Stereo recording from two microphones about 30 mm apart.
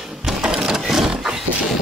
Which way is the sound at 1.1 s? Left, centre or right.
Right.